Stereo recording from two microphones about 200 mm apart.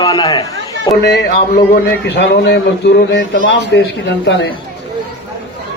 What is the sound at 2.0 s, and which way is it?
Speech, 60° left (ahead or behind).